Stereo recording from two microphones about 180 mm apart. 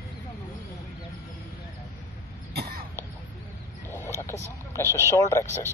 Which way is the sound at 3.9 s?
15° left (ahead or behind).